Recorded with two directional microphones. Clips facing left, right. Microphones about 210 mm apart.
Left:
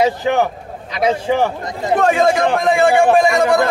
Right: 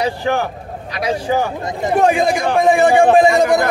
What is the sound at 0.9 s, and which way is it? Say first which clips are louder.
Speech: left 3 dB; 25° left (ahead or behind).